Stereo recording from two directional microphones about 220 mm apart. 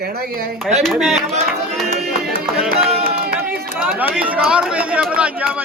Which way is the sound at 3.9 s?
5° right (ahead or behind).